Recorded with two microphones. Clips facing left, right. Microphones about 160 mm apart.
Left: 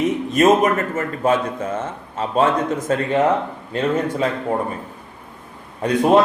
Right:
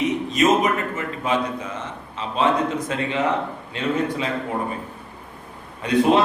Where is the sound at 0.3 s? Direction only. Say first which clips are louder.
Left 4 dB; 45° left (ahead or behind).